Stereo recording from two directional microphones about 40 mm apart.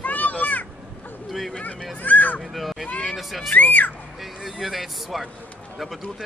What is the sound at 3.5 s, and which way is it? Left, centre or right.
Speech, left.